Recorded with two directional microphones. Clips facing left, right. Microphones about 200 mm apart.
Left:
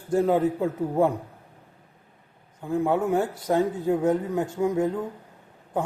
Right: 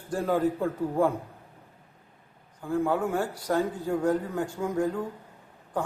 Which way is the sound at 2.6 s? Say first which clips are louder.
Left 2 dB; 20° left (ahead or behind).